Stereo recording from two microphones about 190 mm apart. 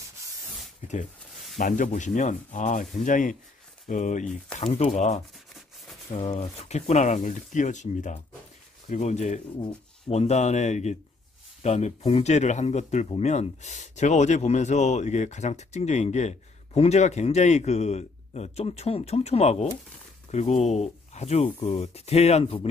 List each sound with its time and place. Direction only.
1.6 s speech: 45° left (ahead or behind)
6.3 s speech: 35° left (ahead or behind)